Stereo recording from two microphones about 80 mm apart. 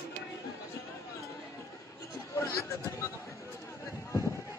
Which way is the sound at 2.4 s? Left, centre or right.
Left.